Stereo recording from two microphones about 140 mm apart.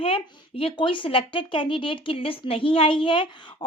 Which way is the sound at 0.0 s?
40° left (ahead or behind).